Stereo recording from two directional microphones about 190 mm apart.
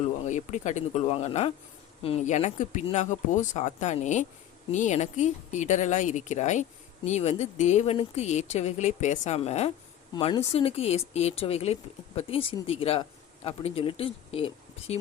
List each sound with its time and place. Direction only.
0.3 s speech: 40° left (ahead or behind)